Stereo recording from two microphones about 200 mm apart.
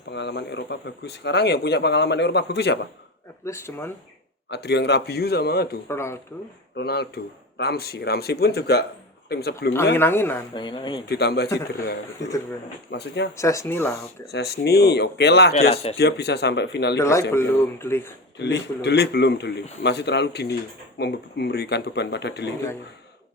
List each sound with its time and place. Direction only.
0.1 s speech: 60° left (ahead or behind)
3.4 s speech: 15° left (ahead or behind)
4.4 s speech: 60° left (ahead or behind)
5.9 s speech: 15° left (ahead or behind)
6.7 s speech: 55° left (ahead or behind)
9.9 s speech: 10° left (ahead or behind)
10.5 s speech: 25° left (ahead or behind)
11.0 s speech: 55° left (ahead or behind)
13.3 s speech: 15° left (ahead or behind)
14.3 s speech: 55° left (ahead or behind)
15.7 s speech: 30° left (ahead or behind)
16.0 s speech: 55° left (ahead or behind)
17.0 s speech: 15° left (ahead or behind)
18.3 s speech: 60° left (ahead or behind)